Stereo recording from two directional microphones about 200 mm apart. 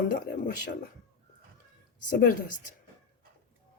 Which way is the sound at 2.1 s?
45° left (ahead or behind).